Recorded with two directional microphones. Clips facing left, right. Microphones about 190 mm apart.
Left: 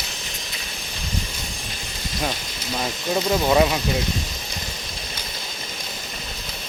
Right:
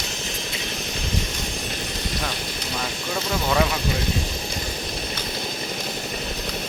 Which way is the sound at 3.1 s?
20° left (ahead or behind).